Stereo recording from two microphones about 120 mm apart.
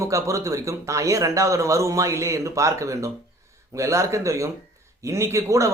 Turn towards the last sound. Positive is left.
turn(degrees=-25)  # may be behind; listen again after turning